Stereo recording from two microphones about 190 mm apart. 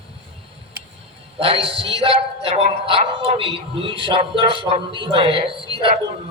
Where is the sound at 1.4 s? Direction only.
30° right (ahead or behind).